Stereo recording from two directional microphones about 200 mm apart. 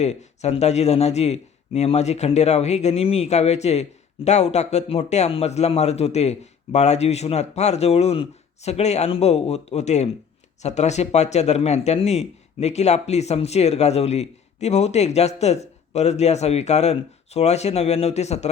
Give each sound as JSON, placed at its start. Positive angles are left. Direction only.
{"t": 0.0, "sound": "speech", "side_deg": 35}